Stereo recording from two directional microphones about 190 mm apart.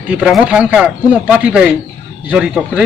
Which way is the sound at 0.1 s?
5° right (ahead or behind).